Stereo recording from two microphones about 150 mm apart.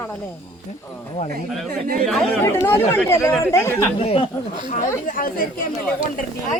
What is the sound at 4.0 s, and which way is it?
Speech, 40° left (ahead or behind).